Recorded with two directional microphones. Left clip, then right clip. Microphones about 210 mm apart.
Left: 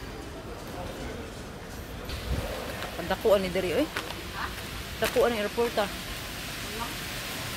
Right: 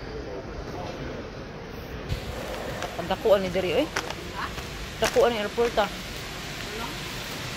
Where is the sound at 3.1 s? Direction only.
30° left (ahead or behind).